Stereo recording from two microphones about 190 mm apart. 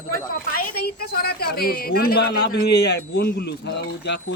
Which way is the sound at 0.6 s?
55° left (ahead or behind).